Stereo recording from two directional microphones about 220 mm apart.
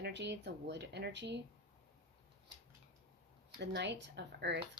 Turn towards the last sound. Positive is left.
turn(degrees=-50)  # may be behind; listen again after turning